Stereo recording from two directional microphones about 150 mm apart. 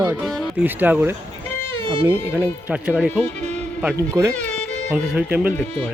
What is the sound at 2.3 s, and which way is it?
Speech, 10° right (ahead or behind).